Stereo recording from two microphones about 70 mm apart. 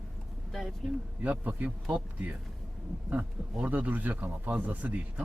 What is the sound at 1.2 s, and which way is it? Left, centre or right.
Speech, right.